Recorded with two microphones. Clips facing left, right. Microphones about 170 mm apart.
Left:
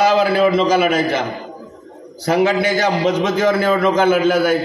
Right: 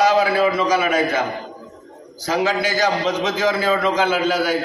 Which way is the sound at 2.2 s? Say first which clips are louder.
Left 5 dB; 60° left (ahead or behind).